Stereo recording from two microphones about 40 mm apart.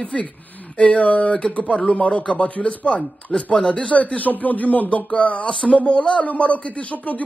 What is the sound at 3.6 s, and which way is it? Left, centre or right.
Speech, left.